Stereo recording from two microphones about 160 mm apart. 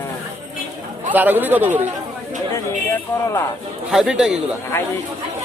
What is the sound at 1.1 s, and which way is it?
Speech, 10° right (ahead or behind).